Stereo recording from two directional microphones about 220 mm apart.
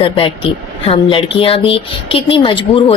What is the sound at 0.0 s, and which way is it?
Speech, 25° left (ahead or behind).